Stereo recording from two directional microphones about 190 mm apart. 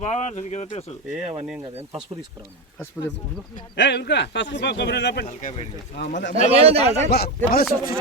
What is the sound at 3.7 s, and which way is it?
Speech, 65° left (ahead or behind).